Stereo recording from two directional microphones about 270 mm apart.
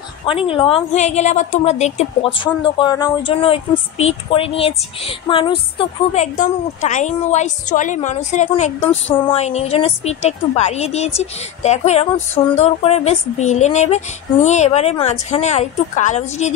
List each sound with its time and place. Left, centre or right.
0.2 s a woman's voice: centre